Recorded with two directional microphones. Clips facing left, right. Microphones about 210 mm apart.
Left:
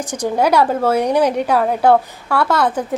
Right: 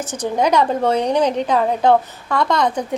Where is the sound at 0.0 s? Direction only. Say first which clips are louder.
Left 2 dB; 10° left (ahead or behind).